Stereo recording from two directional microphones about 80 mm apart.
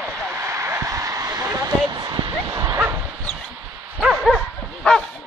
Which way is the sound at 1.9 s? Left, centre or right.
Right.